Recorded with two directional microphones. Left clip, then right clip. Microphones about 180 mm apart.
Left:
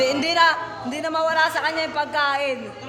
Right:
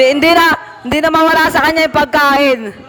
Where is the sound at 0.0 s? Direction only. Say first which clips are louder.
Right 9 dB; 60° right (ahead or behind).